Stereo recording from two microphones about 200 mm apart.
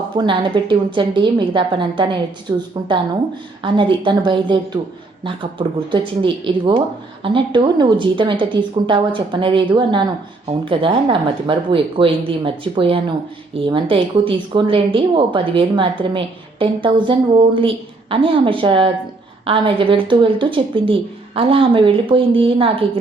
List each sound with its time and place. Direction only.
0.2 s speech: 25° right (ahead or behind)
3.6 s speech: 25° right (ahead or behind)